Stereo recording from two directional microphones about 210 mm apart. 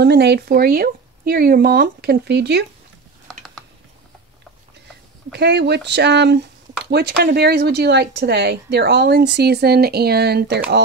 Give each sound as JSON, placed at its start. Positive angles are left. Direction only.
{"t": 0.0, "sound": "speech", "side_deg": -50}
{"t": 5.3, "sound": "speech", "side_deg": -55}